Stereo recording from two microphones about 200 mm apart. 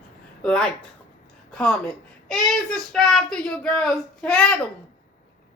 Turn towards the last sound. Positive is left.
turn(degrees=5)  # may be behind; listen again after turning